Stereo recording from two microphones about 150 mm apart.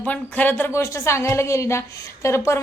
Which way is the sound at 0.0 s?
10° left (ahead or behind).